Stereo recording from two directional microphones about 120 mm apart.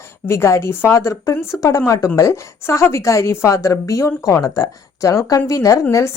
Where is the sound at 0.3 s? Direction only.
20° left (ahead or behind).